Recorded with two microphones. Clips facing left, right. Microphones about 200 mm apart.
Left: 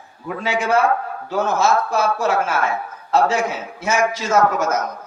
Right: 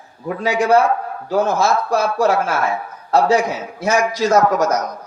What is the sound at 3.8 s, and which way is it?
Speech, 35° right (ahead or behind).